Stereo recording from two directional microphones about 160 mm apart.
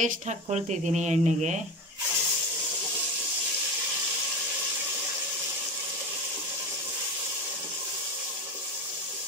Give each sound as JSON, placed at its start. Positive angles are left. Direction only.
{"t": 0.0, "sound": "speech", "side_deg": -45}